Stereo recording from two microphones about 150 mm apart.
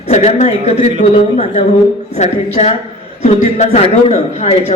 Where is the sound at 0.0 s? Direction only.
45° left (ahead or behind).